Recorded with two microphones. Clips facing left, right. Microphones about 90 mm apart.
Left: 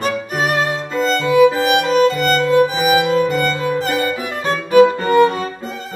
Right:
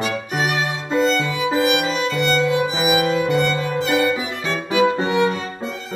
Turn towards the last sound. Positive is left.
turn(degrees=45)  # may be behind; listen again after turning